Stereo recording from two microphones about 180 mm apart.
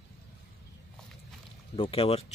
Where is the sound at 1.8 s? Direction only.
30° left (ahead or behind).